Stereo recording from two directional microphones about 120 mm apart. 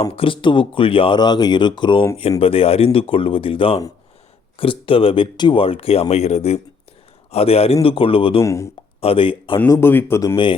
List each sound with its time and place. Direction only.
0.0 s speech: 55° left (ahead or behind)
2.4 s speech: 50° left (ahead or behind)
8.4 s a man's voice: 25° left (ahead or behind)
9.0 s speech: 50° left (ahead or behind)
9.6 s a man's voice: 25° left (ahead or behind)
10.3 s speech: 45° left (ahead or behind)